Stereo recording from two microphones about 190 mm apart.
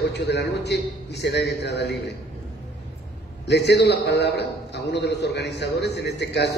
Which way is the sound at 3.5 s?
60° left (ahead or behind).